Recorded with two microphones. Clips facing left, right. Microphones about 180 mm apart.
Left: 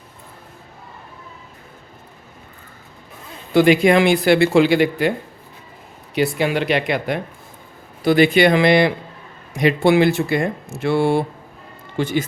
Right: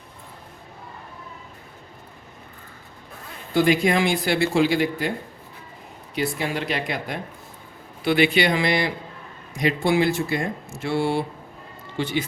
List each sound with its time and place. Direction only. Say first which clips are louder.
3.5 s speech: left 6 dB; 75° left (ahead or behind)
6.1 s speech: left 7 dB; 75° left (ahead or behind)
8.0 s speech: left 6 dB; 40° left (ahead or behind)